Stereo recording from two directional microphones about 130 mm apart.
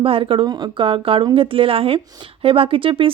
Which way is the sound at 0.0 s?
45° right (ahead or behind).